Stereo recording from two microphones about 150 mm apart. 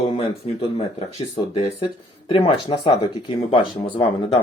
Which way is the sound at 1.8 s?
40° left (ahead or behind).